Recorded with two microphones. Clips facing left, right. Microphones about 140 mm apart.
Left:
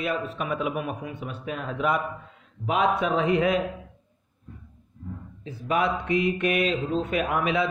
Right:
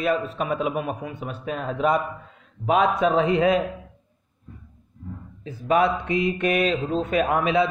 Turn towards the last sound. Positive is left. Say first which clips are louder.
# right 4 dB
turn(degrees=-30)  # may be behind; listen again after turning